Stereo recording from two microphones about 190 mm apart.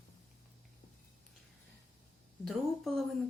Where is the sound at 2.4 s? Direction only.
Centre (ahead or behind).